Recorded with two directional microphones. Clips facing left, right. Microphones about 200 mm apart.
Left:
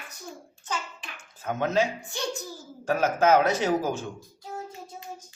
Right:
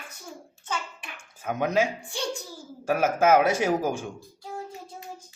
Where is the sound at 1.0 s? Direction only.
10° right (ahead or behind).